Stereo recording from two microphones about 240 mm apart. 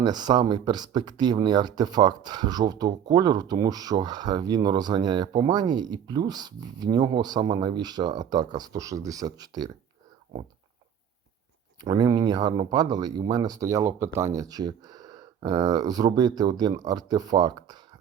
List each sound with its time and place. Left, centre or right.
0.0 s speech: centre
11.8 s speech: centre